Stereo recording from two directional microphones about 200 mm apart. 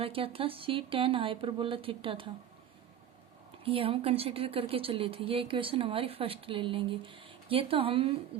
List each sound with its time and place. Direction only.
0.0 s speech: 25° right (ahead or behind)
3.6 s speech: 30° right (ahead or behind)